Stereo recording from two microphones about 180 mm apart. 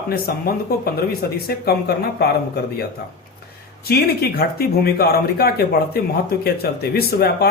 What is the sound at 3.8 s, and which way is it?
Speech, 60° left (ahead or behind).